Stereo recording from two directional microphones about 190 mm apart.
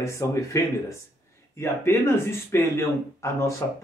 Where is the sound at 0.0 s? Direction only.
15° left (ahead or behind).